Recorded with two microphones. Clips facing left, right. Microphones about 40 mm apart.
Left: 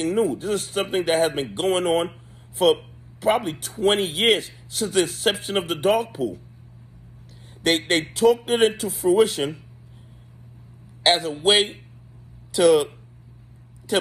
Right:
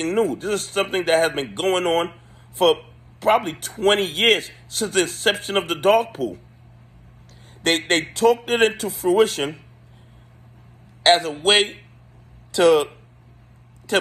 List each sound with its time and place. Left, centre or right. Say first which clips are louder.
0.0 s speech: right 1 dB; right
7.6 s speech: right 1 dB; right
11.0 s speech: right 4 dB; right